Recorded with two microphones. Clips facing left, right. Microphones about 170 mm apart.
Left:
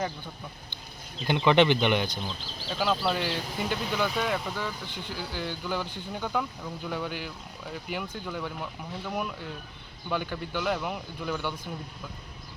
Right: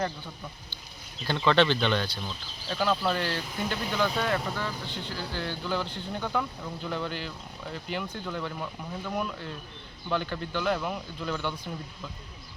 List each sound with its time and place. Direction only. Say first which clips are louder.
1.2 s speech: left 2 dB; 15° left (ahead or behind)
2.6 s speech: even; 5° left (ahead or behind)